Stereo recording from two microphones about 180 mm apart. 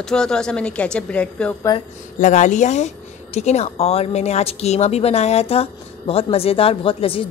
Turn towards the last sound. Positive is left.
turn(degrees=30)  # may be behind; listen again after turning